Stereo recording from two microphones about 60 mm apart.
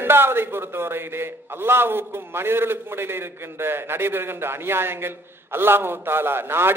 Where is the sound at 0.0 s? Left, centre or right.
Right.